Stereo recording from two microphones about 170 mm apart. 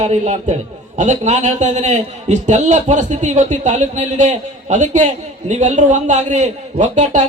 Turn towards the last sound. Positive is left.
turn(degrees=-45)  # may be behind; listen again after turning